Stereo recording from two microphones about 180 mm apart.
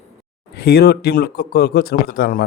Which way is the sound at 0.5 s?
60° left (ahead or behind).